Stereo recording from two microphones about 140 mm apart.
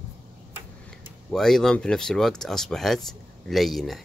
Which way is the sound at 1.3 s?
5° left (ahead or behind).